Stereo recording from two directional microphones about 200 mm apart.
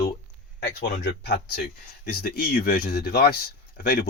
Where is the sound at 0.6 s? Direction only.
55° left (ahead or behind).